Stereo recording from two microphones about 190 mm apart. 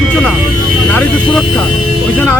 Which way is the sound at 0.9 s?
10° left (ahead or behind).